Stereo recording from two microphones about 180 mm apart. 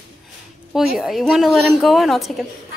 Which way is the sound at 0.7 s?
Centre (ahead or behind).